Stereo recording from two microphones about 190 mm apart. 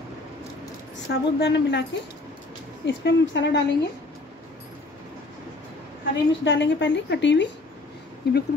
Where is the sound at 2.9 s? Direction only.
70° left (ahead or behind).